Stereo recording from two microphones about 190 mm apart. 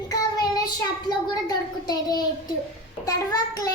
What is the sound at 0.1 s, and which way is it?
Child singing, 20° left (ahead or behind).